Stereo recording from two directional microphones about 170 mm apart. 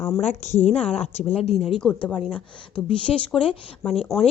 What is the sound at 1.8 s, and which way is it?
Speech, 5° left (ahead or behind).